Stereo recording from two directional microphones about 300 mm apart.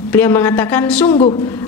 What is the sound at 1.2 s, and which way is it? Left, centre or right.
Speech, centre.